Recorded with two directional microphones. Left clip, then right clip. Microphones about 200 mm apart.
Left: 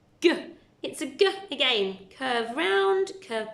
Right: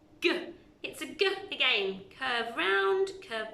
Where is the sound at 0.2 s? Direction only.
30° left (ahead or behind).